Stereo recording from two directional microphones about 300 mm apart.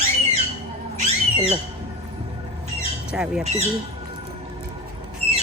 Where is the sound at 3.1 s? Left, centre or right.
Centre.